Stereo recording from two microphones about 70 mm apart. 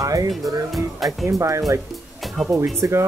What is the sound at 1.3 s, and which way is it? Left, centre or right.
Speech, right.